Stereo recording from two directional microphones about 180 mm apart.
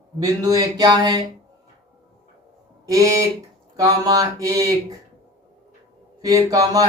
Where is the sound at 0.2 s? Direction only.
20° right (ahead or behind).